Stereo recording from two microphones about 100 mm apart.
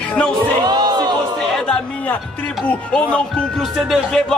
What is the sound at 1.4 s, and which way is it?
Chatter, 5° left (ahead or behind).